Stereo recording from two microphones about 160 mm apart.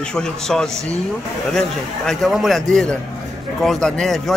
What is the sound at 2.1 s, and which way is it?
Speech, centre (ahead or behind).